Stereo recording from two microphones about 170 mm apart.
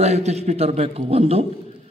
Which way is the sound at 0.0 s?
40° right (ahead or behind).